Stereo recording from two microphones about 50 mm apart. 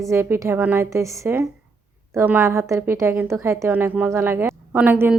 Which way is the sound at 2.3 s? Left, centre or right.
Right.